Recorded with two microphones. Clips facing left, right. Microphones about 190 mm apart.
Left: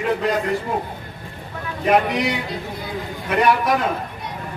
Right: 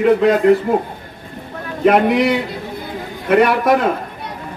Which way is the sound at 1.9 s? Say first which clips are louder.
Right 5 dB; 60° right (ahead or behind).